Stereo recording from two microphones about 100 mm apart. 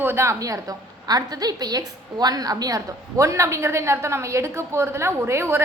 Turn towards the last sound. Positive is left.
turn(degrees=-25)  # may be behind; listen again after turning